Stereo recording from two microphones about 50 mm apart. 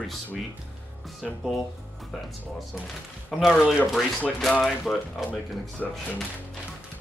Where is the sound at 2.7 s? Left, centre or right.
Centre.